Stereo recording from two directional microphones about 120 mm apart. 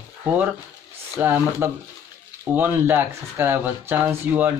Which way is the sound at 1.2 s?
20° right (ahead or behind).